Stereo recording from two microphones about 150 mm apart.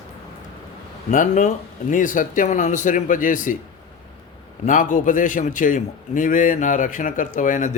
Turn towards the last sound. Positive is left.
turn(degrees=60)  # may be behind; listen again after turning